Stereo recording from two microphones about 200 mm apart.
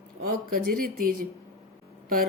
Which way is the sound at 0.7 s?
45° right (ahead or behind).